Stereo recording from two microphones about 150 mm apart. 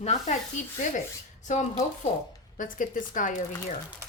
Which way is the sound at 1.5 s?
50° left (ahead or behind).